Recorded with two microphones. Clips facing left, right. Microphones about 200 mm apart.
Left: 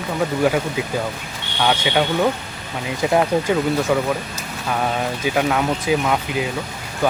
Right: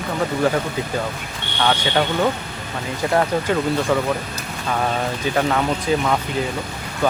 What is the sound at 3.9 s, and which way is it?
Speech, 10° left (ahead or behind).